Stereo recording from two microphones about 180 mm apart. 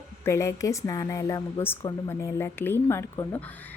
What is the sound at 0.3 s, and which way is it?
Speech, 15° left (ahead or behind).